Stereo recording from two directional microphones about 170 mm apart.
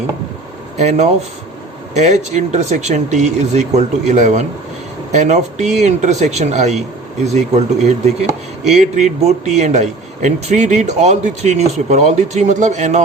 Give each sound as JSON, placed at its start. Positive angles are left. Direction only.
{"t": 0.8, "sound": "a man's voice", "side_deg": -40}